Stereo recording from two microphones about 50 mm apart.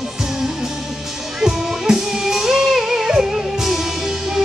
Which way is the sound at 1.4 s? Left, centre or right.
Centre.